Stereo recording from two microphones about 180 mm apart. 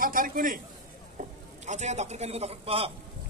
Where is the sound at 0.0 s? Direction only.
50° right (ahead or behind).